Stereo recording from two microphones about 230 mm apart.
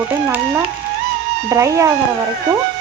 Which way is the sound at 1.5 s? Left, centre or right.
Centre.